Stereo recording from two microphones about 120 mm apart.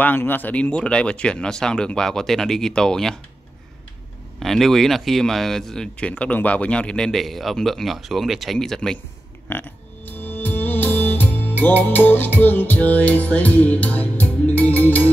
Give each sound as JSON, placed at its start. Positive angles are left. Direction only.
{"t": 0.0, "sound": "speech", "side_deg": 15}
{"t": 4.4, "sound": "speech", "side_deg": 0}
{"t": 9.5, "sound": "music", "side_deg": 15}